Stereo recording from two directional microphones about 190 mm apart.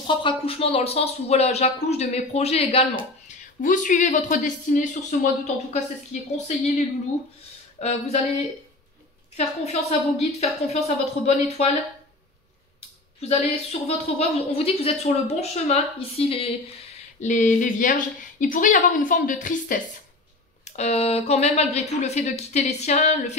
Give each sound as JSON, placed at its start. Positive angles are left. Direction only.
{"t": 0.0, "sound": "a woman's voice", "side_deg": 25}
{"t": 3.3, "sound": "a woman's voice", "side_deg": 45}
{"t": 7.8, "sound": "a woman's voice", "side_deg": 35}
{"t": 9.4, "sound": "a woman's voice", "side_deg": 35}
{"t": 13.2, "sound": "a woman's voice", "side_deg": 35}